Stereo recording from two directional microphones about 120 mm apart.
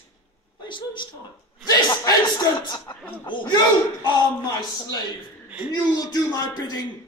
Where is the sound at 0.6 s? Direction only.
40° left (ahead or behind).